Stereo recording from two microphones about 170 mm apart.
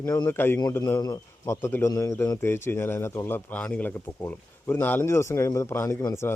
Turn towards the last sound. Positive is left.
turn(degrees=15)  # may be behind; listen again after turning